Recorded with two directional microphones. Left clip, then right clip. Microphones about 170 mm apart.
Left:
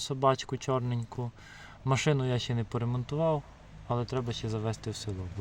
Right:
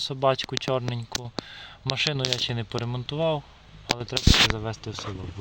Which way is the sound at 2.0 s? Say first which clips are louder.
Right 8 dB; 10° right (ahead or behind).